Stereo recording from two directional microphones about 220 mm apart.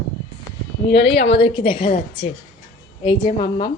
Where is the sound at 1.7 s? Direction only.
35° left (ahead or behind).